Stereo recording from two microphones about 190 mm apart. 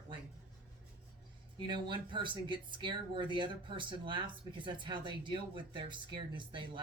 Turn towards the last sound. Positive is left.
turn(degrees=-25)  # may be behind; listen again after turning